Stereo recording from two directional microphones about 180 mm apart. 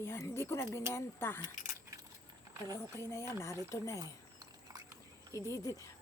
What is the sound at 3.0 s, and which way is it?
A woman's voice, 15° left (ahead or behind).